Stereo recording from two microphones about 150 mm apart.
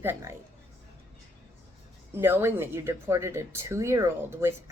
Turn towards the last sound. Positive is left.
turn(degrees=-15)  # may be behind; listen again after turning